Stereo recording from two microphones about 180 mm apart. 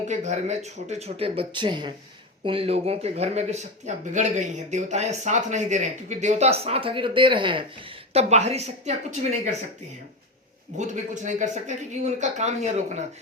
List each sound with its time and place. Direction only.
0.1 s speech: 40° right (ahead or behind)
10.8 s speech: 40° right (ahead or behind)